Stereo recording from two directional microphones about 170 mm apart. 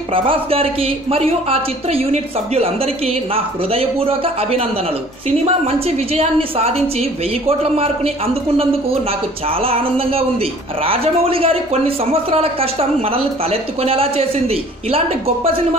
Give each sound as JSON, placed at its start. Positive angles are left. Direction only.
{"t": 0.1, "sound": "speech", "side_deg": -35}
{"t": 9.6, "sound": "speech", "side_deg": -35}